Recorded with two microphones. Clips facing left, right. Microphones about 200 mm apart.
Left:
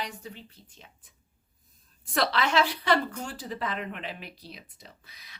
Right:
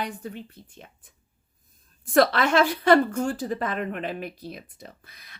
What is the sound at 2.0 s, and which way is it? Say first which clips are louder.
Speech: right 7 dB; 50° right (ahead or behind).